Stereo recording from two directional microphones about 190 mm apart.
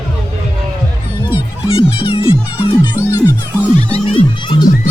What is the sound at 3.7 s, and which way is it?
Music, 30° left (ahead or behind).